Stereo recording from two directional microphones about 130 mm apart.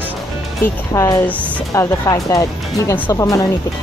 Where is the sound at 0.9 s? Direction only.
25° left (ahead or behind).